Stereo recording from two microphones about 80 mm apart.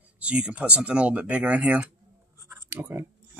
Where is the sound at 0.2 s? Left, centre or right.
Centre.